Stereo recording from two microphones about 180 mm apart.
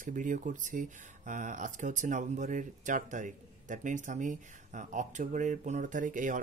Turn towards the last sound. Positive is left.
turn(degrees=-45)  # may be behind; listen again after turning